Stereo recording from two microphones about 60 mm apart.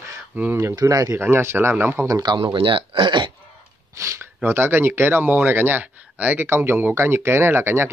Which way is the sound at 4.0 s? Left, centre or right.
Right.